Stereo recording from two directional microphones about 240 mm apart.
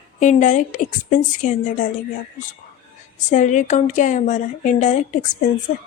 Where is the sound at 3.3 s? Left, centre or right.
Left.